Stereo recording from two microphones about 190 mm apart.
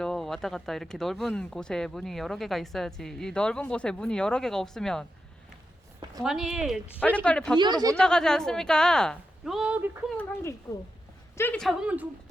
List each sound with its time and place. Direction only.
0.0 s speech: centre (ahead or behind)
6.1 s speech: centre (ahead or behind)
7.5 s speech: 20° right (ahead or behind)
7.9 s speech: 5° left (ahead or behind)
10.7 s a woman's voice: 20° left (ahead or behind)
11.3 s speech: 5° left (ahead or behind)